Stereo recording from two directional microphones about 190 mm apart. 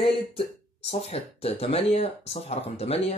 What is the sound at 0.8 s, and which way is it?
Speech, 30° left (ahead or behind).